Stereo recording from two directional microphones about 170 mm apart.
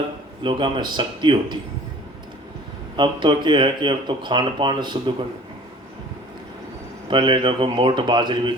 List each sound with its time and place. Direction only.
0.4 s speech: 30° right (ahead or behind)
2.9 s speech: 30° right (ahead or behind)
7.1 s speech: 30° right (ahead or behind)